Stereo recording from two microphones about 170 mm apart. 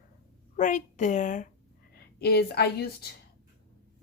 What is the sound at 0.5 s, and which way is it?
Speech, 45° left (ahead or behind).